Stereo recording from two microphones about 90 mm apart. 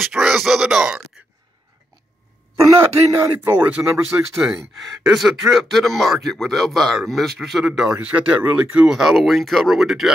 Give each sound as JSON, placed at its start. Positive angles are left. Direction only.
{"t": 0.0, "sound": "speech", "side_deg": -5}
{"t": 2.5, "sound": "speech", "side_deg": -35}
{"t": 5.0, "sound": "speech", "side_deg": 0}
{"t": 8.9, "sound": "speech", "side_deg": 0}